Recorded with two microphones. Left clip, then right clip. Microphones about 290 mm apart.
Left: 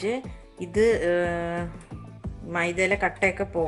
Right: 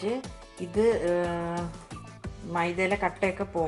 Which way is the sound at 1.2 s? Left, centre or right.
Left.